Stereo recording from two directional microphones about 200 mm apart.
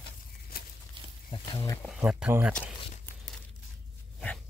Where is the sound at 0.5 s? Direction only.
50° left (ahead or behind).